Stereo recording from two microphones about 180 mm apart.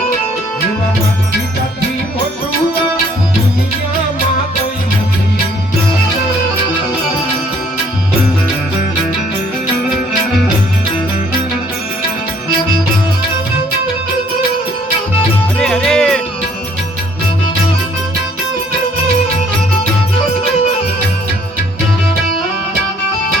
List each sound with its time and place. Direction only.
15.5 s music: 5° left (ahead or behind)